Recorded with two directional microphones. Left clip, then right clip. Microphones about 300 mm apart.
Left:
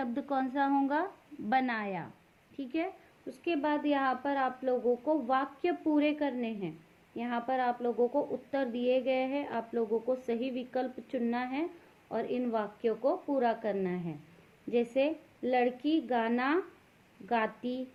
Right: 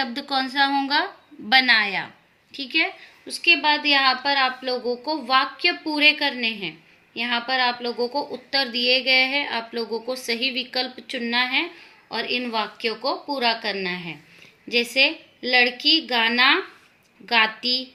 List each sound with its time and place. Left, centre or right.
0.0 s a woman's voice: centre